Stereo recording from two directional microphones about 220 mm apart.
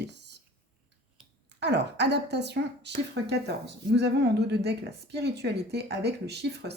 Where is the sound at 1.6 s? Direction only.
50° right (ahead or behind).